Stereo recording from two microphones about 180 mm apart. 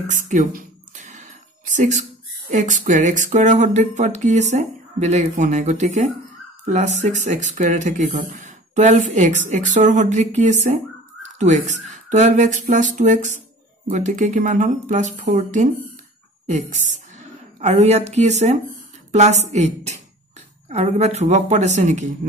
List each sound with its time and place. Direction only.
0.0 s a sound: 45° right (ahead or behind)
2.5 s speech: 45° right (ahead or behind)
17.6 s speech: 40° right (ahead or behind)